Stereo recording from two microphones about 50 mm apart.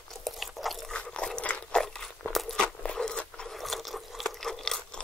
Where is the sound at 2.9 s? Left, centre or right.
Centre.